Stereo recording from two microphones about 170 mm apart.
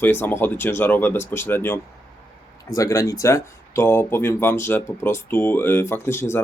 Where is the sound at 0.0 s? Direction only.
10° left (ahead or behind).